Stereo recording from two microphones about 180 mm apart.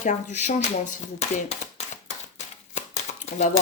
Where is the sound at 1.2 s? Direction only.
40° left (ahead or behind).